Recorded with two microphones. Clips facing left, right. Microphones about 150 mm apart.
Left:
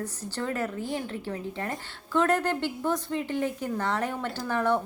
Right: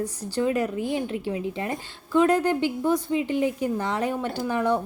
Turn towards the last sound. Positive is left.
turn(degrees=-15)  # may be behind; listen again after turning